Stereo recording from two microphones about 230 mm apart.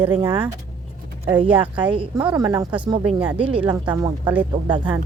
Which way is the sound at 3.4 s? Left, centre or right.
Right.